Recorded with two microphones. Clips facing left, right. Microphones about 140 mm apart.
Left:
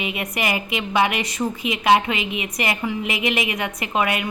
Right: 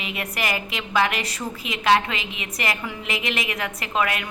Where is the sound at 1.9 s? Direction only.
20° left (ahead or behind).